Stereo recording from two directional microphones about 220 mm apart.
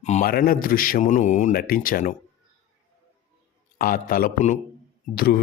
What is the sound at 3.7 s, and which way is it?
A man's voice, 40° left (ahead or behind).